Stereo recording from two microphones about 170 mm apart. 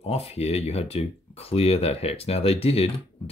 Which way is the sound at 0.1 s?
35° left (ahead or behind).